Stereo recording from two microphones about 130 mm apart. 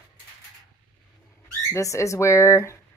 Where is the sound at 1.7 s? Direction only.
25° left (ahead or behind).